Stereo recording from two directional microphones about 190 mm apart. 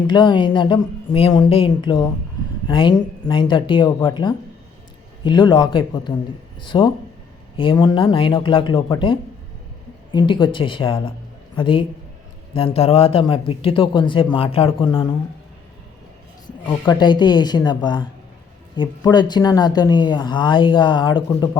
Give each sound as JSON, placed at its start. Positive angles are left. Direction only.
{"t": 0.1, "sound": "speech", "side_deg": 25}
{"t": 5.2, "sound": "speech", "side_deg": 25}
{"t": 16.6, "sound": "speech", "side_deg": 25}